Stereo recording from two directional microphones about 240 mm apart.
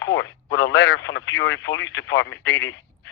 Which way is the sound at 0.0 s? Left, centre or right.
Left.